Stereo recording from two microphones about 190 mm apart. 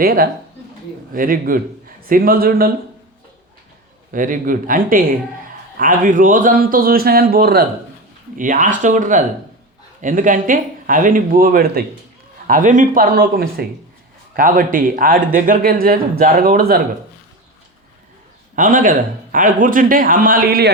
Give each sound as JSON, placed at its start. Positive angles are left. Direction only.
{"t": 0.0, "sound": "speech", "side_deg": -50}
{"t": 4.1, "sound": "speech", "side_deg": -45}
{"t": 8.4, "sound": "speech", "side_deg": -45}
{"t": 18.5, "sound": "speech", "side_deg": -45}